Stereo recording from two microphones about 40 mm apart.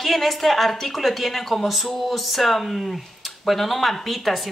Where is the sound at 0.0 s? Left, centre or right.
Centre.